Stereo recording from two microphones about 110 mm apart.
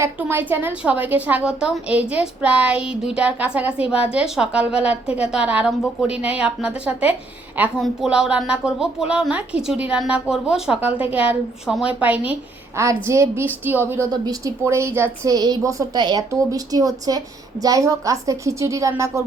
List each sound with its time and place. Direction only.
0.0 s a woman's voice: 20° right (ahead or behind)
12.7 s a woman's voice: 25° right (ahead or behind)
14.1 s a woman's voice: 30° right (ahead or behind)
15.3 s a woman's voice: 35° right (ahead or behind)